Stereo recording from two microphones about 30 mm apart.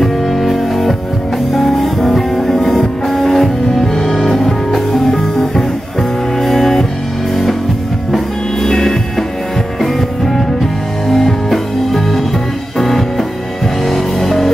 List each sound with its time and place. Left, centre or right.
0.0 s music: centre
8.6 s music: left
9.8 s music: centre